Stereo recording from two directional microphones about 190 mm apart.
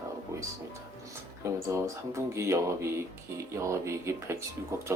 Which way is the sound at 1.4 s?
15° right (ahead or behind).